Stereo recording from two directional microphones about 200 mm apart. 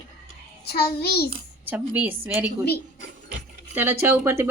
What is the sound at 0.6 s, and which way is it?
Child singing, 50° left (ahead or behind).